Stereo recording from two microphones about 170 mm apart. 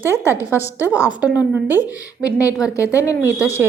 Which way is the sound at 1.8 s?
20° left (ahead or behind).